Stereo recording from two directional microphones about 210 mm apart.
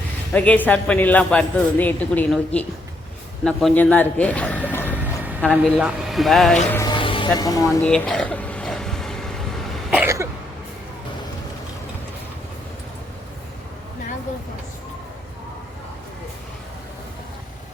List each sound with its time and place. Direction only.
0.3 s speech: 5° left (ahead or behind)
5.2 s speech: 5° right (ahead or behind)
6.7 s music: 10° left (ahead or behind)
6.9 s speech: 25° left (ahead or behind)
7.9 s a sound: 5° left (ahead or behind)
9.9 s cough: 10° right (ahead or behind)